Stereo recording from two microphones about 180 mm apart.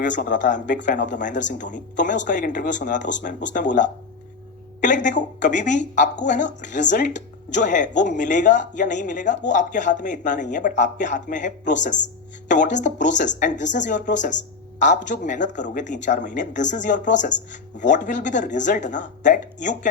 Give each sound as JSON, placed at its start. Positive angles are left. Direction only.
{"t": 0.0, "sound": "speech", "side_deg": 45}